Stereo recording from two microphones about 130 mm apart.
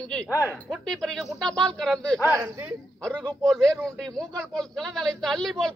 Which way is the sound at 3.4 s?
5° left (ahead or behind).